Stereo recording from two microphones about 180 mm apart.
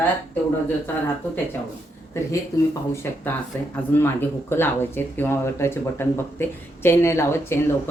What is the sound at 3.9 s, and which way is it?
Speech, 10° left (ahead or behind).